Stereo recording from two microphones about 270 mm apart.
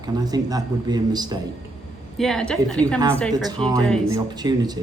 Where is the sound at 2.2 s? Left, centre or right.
Centre.